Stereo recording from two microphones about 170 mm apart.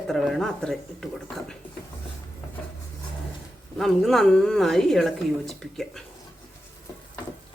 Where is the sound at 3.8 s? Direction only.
Centre (ahead or behind).